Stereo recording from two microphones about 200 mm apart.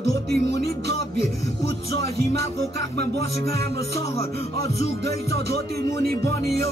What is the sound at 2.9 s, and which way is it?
Music, 55° right (ahead or behind).